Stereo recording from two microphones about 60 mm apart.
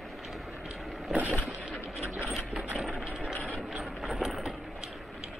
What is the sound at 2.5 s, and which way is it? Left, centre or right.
Mechanisms, centre.